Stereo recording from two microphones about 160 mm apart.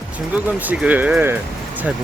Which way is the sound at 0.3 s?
10° right (ahead or behind).